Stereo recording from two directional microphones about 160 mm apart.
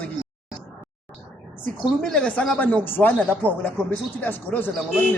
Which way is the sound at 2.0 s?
5° left (ahead or behind).